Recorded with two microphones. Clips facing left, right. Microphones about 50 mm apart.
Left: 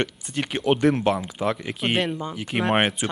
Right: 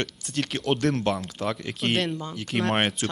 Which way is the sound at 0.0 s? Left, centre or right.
Centre.